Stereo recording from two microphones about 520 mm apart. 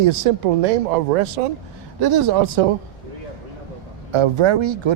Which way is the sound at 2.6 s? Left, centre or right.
Right.